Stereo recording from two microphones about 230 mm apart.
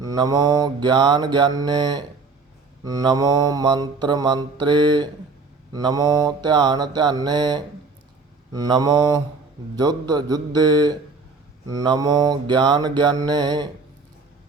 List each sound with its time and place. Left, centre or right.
0.0 s mantra: centre